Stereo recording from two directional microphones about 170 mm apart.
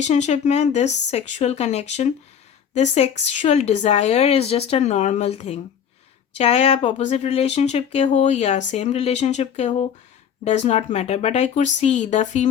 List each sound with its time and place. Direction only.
0.0 s speech: 40° left (ahead or behind)